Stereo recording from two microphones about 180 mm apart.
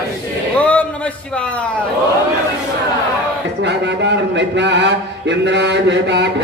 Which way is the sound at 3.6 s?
75° right (ahead or behind).